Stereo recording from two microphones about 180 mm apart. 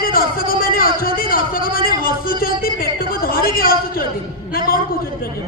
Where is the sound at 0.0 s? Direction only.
55° left (ahead or behind).